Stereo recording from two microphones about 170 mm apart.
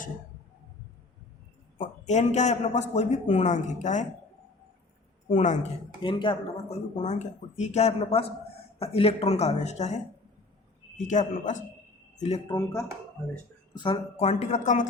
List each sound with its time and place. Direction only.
1.8 s a man's voice: 45° left (ahead or behind)
5.3 s a man's voice: 45° left (ahead or behind)
6.0 s speech: 30° left (ahead or behind)
7.0 s a man's voice: 45° left (ahead or behind)
12.5 s speech: 20° left (ahead or behind); by 14.8 s 45° left (ahead or behind)